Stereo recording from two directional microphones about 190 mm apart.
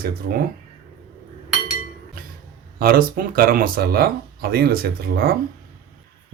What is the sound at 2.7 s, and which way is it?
Speech, 50° right (ahead or behind).